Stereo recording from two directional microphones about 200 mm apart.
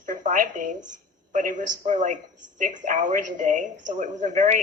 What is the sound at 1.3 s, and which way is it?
A woman's voice, 40° right (ahead or behind).